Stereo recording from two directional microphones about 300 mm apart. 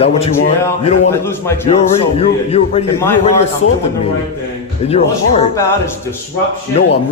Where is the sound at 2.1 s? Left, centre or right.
Centre.